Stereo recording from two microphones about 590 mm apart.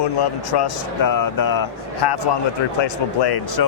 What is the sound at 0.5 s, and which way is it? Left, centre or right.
Speech, left.